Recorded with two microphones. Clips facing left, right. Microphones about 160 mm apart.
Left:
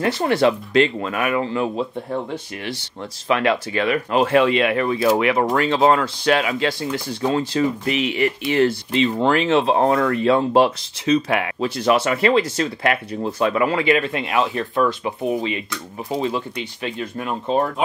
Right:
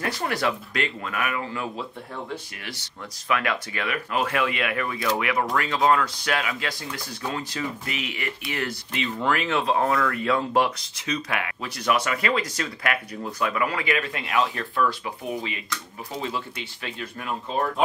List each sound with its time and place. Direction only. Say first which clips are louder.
0.0 s speech: left 9 dB; 25° left (ahead or behind)
3.3 s speech: left 7 dB; 30° left (ahead or behind)